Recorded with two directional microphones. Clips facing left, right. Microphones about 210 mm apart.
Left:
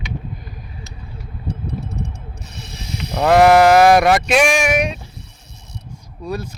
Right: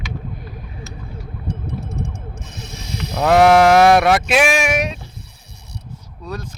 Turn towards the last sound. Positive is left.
turn(degrees=10)  # may be behind; listen again after turning